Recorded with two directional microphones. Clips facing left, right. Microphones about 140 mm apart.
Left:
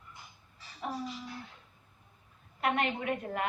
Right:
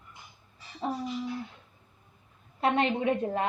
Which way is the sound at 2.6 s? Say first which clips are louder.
Right 5 dB; 30° right (ahead or behind).